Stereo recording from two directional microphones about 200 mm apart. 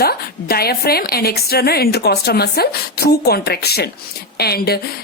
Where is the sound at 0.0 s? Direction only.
50° left (ahead or behind).